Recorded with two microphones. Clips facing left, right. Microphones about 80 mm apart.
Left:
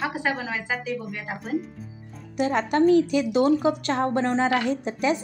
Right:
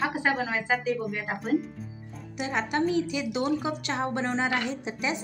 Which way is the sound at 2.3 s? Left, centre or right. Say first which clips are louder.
Left 6 dB; left.